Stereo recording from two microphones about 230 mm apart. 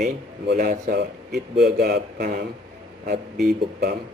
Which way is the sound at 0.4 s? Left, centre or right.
Right.